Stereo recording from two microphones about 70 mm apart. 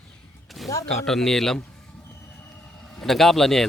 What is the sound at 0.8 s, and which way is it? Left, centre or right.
Speech, centre.